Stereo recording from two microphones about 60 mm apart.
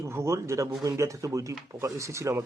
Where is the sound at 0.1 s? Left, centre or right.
Right.